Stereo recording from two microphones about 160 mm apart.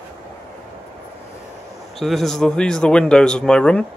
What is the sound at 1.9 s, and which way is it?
Speech, centre (ahead or behind).